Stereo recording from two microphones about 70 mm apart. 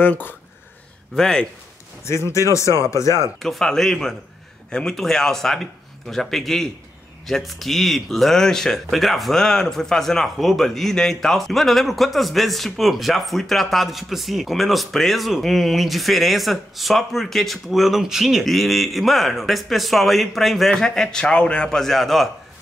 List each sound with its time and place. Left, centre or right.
0.0 s speech: left
1.1 s speech: centre
2.0 s speech: left
3.4 s speech: centre